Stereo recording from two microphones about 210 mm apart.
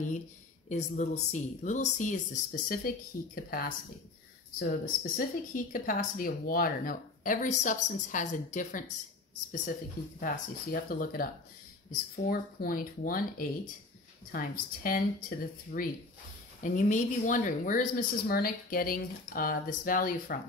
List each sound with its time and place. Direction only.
0.7 s a woman's voice: 35° left (ahead or behind)
10.2 s speech: 45° left (ahead or behind)
12.3 s a woman's voice: 45° left (ahead or behind)